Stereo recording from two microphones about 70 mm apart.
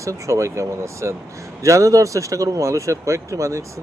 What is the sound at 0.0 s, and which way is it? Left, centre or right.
Speech, right.